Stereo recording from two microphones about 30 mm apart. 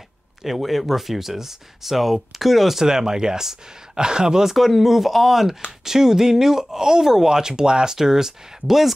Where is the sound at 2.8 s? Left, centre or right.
Centre.